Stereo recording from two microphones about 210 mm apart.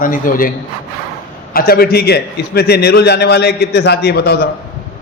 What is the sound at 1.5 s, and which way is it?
A man's voice, 45° left (ahead or behind).